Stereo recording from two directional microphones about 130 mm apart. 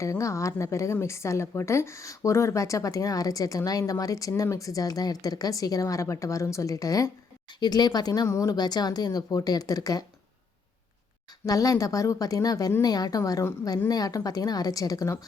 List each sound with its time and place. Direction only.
0.0 s a woman's voice: 25° left (ahead or behind)
11.4 s a woman's voice: 25° left (ahead or behind)